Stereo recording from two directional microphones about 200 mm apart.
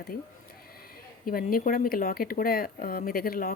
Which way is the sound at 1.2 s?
45° left (ahead or behind).